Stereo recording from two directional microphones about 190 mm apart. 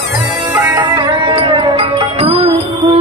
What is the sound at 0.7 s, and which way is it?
Music, 25° right (ahead or behind).